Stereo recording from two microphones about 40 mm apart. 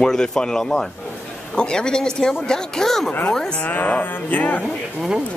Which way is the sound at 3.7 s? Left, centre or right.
Left.